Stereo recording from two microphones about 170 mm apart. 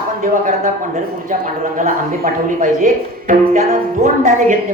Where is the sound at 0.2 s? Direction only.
50° right (ahead or behind).